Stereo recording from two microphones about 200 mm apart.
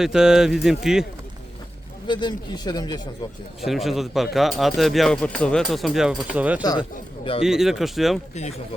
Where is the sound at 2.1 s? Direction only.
20° left (ahead or behind).